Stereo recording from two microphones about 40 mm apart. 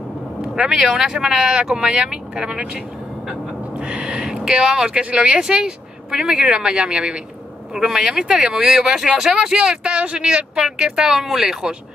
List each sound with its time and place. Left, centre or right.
0.4 s speech: centre
7.7 s speech: centre
8.3 s speech: right